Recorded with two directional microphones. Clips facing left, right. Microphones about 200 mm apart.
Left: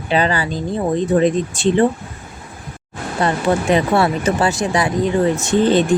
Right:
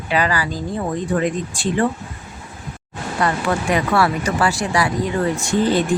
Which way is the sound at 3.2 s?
25° left (ahead or behind).